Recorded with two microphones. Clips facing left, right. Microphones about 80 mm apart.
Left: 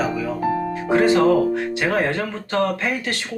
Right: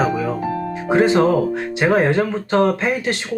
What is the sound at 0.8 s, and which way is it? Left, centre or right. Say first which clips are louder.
Speech: right 1 dB; right.